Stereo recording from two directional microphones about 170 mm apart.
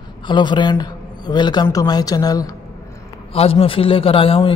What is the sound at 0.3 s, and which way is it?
A man's voice, 25° left (ahead or behind).